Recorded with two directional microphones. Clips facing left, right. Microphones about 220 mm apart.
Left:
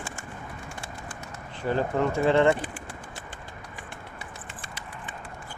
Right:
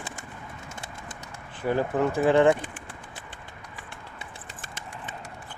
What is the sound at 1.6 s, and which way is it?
Speech, 10° right (ahead or behind).